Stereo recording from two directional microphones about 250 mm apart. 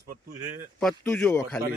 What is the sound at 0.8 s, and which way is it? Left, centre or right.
Speech, centre.